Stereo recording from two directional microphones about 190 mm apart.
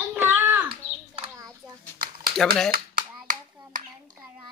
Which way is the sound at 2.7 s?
45° right (ahead or behind).